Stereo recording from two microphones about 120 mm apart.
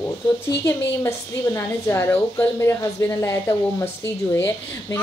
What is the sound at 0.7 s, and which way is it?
A woman's voice, 20° left (ahead or behind).